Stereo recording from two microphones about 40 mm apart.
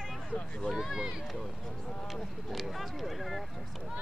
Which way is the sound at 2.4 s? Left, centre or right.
Centre.